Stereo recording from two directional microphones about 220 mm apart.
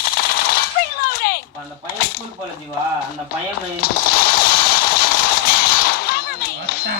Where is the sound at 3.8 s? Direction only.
45° left (ahead or behind).